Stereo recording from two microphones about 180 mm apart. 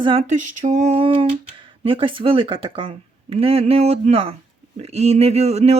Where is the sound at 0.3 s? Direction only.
40° right (ahead or behind).